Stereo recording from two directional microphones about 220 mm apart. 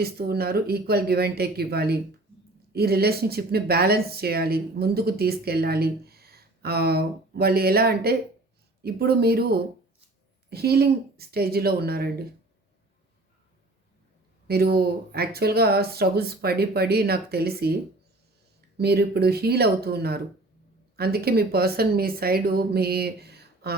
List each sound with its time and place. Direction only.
0.0 s speech: 45° right (ahead or behind)
14.4 s speech: 45° right (ahead or behind)
18.8 s speech: 45° right (ahead or behind)